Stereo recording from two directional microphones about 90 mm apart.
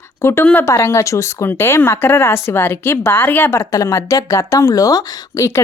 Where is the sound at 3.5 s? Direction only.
35° left (ahead or behind).